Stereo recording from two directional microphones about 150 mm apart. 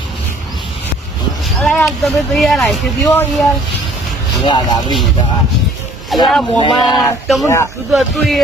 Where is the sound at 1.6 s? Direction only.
5° left (ahead or behind).